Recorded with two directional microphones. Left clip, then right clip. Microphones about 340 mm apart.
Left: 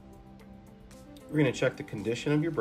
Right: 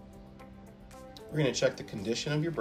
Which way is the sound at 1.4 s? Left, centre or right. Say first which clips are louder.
Left 1 dB; left.